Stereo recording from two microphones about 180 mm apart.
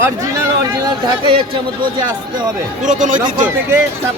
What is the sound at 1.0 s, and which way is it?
Speech, 25° right (ahead or behind).